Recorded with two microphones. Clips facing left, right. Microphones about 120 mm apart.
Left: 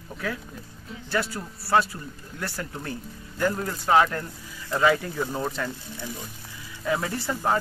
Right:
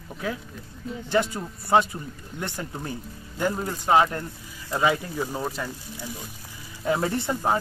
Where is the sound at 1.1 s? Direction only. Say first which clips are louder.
Right 4 dB; 20° right (ahead or behind).